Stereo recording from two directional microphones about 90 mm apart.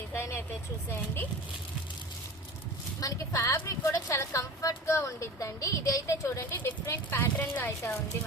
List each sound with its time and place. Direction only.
0.1 s vehicle: 30° left (ahead or behind)
0.9 s speech: 25° left (ahead or behind)
3.0 s speech: 35° left (ahead or behind); by 7.9 s 20° left (ahead or behind)